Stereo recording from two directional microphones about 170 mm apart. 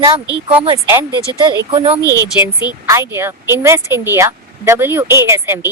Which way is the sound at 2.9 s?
15° right (ahead or behind).